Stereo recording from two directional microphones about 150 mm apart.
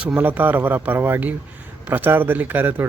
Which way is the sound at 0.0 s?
10° right (ahead or behind).